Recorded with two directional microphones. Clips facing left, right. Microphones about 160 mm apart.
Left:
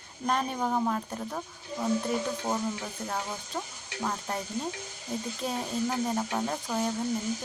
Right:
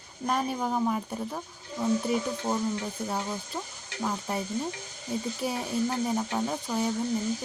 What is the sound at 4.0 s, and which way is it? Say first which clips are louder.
Speech: right 2 dB; 5° right (ahead or behind).